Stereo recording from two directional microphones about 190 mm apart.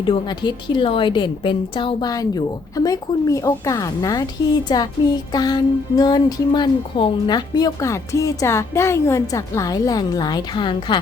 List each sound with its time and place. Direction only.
0.0 s music: 25° left (ahead or behind)